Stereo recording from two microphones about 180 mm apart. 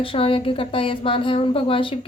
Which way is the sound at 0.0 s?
30° left (ahead or behind).